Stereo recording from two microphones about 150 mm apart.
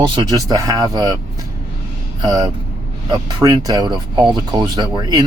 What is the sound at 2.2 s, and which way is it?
Speech, 30° right (ahead or behind).